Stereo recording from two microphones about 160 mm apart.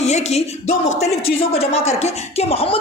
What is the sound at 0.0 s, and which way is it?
Speech, 45° left (ahead or behind).